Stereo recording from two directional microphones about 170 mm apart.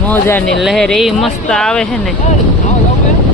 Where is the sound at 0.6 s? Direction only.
Centre (ahead or behind).